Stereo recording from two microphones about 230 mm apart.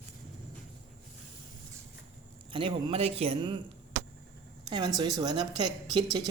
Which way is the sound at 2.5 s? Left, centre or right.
Right.